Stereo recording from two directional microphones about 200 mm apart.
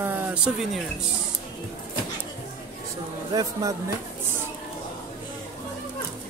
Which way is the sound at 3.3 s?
20° right (ahead or behind).